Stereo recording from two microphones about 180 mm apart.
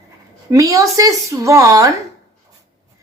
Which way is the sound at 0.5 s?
20° right (ahead or behind).